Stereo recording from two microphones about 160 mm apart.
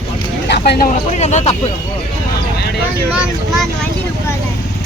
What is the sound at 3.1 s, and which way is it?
Speech, centre (ahead or behind).